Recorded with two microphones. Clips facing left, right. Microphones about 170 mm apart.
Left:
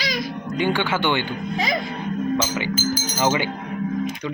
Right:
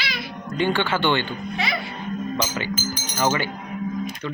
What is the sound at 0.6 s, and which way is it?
Speech, 15° left (ahead or behind).